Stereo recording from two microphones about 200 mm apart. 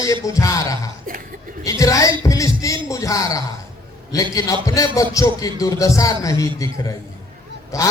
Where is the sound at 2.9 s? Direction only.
15° left (ahead or behind).